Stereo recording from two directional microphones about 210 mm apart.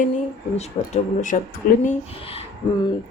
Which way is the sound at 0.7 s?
30° left (ahead or behind).